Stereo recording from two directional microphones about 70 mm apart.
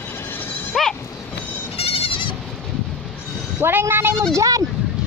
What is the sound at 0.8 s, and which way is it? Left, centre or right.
Goat, centre.